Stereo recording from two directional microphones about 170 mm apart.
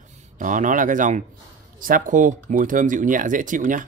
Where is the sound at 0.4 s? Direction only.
50° right (ahead or behind).